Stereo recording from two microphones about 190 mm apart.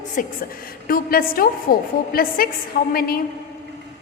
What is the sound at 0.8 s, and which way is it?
A woman's voice, 50° left (ahead or behind).